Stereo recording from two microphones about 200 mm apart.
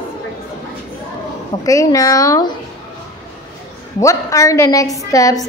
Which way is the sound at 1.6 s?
15° left (ahead or behind).